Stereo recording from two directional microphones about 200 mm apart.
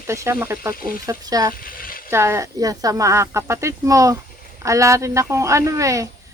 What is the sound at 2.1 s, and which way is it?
Speech, 15° right (ahead or behind).